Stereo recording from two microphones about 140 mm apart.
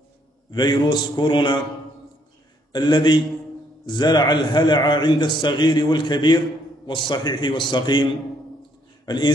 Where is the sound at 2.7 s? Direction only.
30° left (ahead or behind).